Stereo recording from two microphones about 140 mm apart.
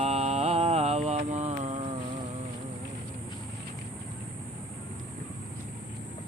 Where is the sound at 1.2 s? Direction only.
55° right (ahead or behind).